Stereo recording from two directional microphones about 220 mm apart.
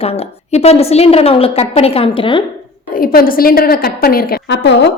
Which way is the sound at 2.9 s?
40° left (ahead or behind).